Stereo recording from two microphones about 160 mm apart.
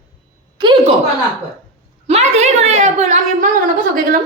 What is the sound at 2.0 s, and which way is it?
A woman's voice, 40° right (ahead or behind).